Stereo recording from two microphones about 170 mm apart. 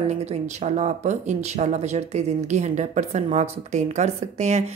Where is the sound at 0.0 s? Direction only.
40° right (ahead or behind).